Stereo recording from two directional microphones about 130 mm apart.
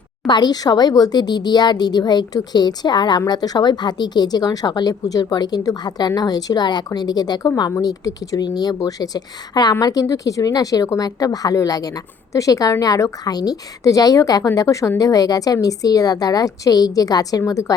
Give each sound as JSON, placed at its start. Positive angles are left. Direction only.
{"t": 0.3, "sound": "speech", "side_deg": 35}